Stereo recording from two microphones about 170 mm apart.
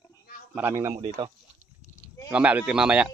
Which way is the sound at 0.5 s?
15° right (ahead or behind).